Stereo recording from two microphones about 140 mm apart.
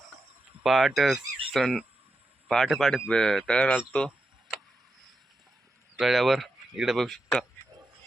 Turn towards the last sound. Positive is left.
turn(degrees=5)  # may be behind; listen again after turning